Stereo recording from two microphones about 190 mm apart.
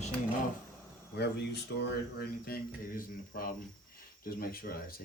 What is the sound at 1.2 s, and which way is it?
Speech, 60° left (ahead or behind).